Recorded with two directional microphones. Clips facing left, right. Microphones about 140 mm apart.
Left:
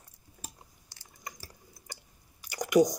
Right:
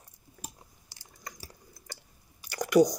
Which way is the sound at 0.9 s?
5° right (ahead or behind).